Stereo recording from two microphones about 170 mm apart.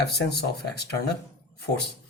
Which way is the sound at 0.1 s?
70° left (ahead or behind).